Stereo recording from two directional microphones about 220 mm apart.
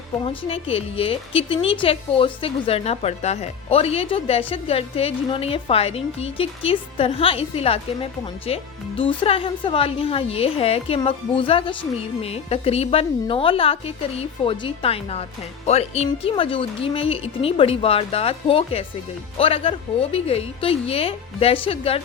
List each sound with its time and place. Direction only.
0.3 s speech: 25° left (ahead or behind)